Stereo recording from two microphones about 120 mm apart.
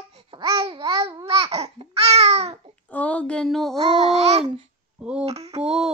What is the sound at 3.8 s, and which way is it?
Babbling, 60° right (ahead or behind).